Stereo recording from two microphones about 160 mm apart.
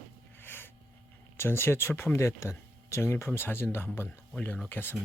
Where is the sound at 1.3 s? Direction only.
15° left (ahead or behind).